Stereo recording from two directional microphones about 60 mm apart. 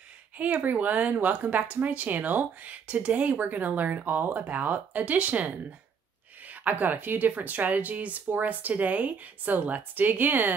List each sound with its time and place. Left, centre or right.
0.4 s a woman's voice: right